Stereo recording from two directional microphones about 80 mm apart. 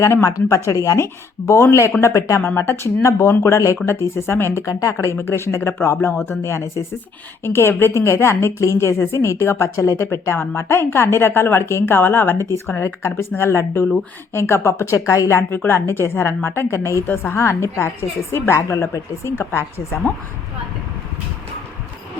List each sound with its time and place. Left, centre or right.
0.0 s a woman's voice: left
5.1 s a woman's voice: left